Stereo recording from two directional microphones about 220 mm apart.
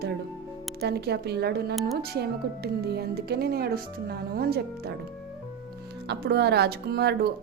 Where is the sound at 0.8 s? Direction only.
45° right (ahead or behind).